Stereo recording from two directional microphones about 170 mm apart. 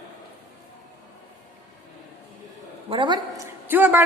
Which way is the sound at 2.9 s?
30° right (ahead or behind).